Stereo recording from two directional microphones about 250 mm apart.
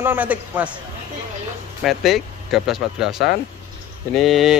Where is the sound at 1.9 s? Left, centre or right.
Centre.